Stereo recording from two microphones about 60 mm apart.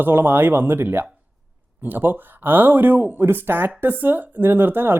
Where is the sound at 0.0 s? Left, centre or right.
Right.